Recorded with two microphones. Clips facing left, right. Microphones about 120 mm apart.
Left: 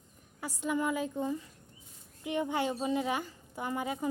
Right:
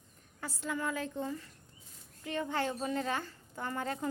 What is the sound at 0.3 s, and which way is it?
A woman's voice, 15° left (ahead or behind).